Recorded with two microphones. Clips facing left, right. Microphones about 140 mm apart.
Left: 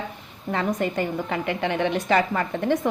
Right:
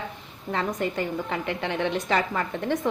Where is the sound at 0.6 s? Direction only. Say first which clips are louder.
Left 3 dB; 15° left (ahead or behind).